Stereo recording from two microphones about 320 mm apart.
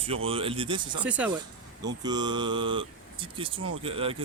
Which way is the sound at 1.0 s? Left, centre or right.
Centre.